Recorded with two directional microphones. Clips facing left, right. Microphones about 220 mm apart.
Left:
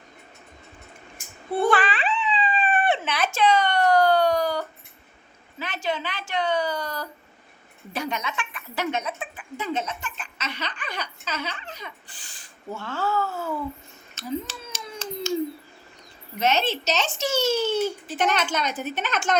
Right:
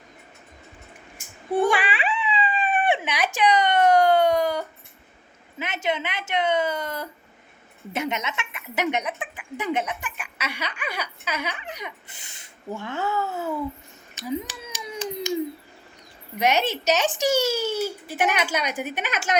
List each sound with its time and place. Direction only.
1.5 s a sound: 15° right (ahead or behind)
7.9 s a woman's voice: 20° right (ahead or behind)
14.2 s finger snapping: 15° right (ahead or behind)
16.4 s speech: 15° right (ahead or behind)